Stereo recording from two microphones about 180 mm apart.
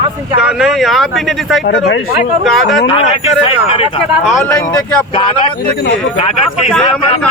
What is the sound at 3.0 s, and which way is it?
Speech, 35° left (ahead or behind).